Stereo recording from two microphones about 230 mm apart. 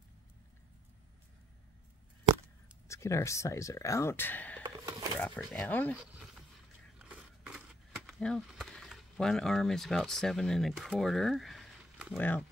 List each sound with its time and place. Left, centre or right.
2.9 s speech: centre
7.0 s scissors: centre
8.1 s speech: centre